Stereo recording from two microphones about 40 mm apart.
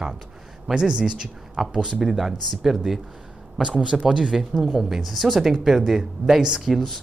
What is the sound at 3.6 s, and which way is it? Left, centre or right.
Speech, centre.